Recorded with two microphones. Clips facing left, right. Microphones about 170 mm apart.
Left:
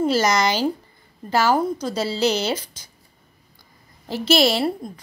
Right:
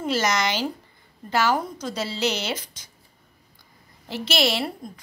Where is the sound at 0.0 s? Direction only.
35° left (ahead or behind).